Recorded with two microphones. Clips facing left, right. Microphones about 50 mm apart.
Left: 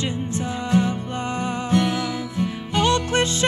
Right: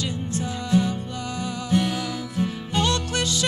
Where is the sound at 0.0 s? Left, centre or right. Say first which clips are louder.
Left 2 dB; left.